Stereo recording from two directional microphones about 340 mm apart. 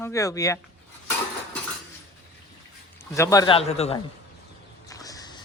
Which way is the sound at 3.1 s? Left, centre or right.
Centre.